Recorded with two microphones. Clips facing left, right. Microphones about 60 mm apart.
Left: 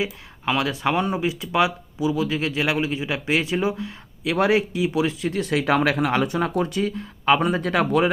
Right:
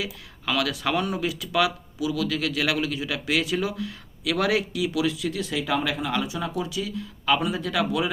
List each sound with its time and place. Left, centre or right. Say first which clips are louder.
0.0 s speech: left 6 dB; left
5.5 s speech: left 7 dB; left